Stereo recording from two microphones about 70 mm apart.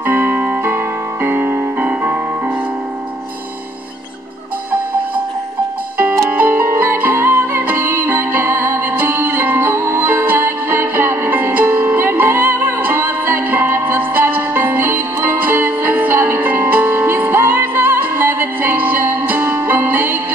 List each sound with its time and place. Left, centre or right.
0.0 s music: right
5.9 s music: right